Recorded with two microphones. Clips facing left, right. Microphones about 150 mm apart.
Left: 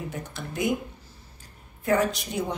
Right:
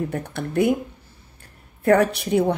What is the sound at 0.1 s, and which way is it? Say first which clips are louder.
Speech: right 9 dB; 65° right (ahead or behind).